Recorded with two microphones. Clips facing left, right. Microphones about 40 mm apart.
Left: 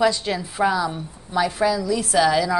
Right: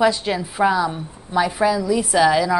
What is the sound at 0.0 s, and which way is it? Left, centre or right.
A woman's voice, centre.